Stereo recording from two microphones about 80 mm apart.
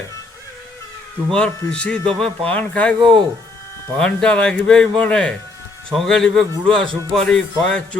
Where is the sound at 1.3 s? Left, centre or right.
Centre.